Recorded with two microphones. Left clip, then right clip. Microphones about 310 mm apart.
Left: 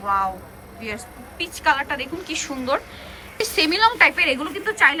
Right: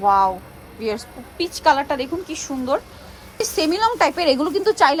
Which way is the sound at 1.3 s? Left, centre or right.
Centre.